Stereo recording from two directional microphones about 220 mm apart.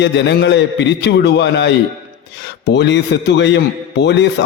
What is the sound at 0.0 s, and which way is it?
A man's voice, 50° left (ahead or behind).